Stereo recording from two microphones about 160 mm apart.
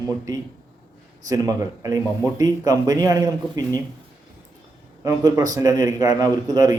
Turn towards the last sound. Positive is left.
turn(degrees=-20)  # may be behind; listen again after turning